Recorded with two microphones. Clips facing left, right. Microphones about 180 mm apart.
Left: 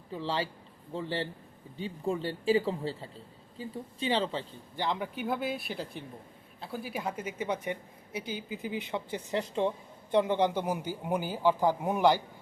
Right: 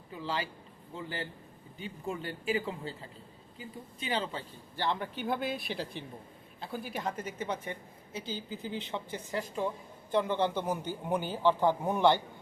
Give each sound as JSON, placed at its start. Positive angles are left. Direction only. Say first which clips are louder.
{"t": 0.1, "sound": "a woman's voice", "louder": "left 3 dB", "side_deg": 30}